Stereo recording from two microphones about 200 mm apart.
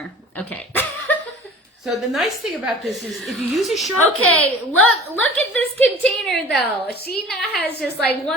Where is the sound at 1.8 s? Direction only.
Centre (ahead or behind).